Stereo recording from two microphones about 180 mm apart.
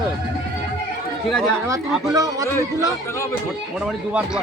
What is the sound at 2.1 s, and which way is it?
Speech, 20° right (ahead or behind).